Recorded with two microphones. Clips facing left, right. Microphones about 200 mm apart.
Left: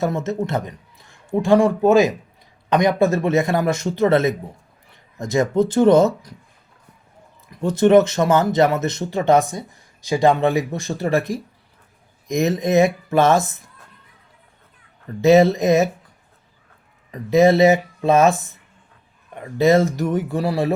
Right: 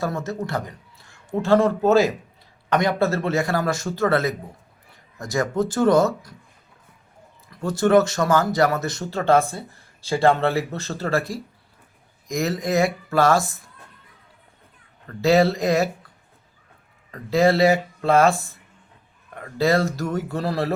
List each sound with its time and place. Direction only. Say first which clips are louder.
0.0 s a man's voice: left 5 dB; 20° left (ahead or behind)
7.4 s a man's voice: left 5 dB; 20° left (ahead or behind)
15.0 s a man's voice: left 5 dB; 20° left (ahead or behind)
17.1 s a man's voice: left 4 dB; 20° left (ahead or behind)